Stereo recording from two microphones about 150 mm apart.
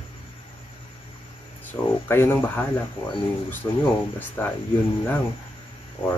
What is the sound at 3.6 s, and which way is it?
Speech, 20° left (ahead or behind).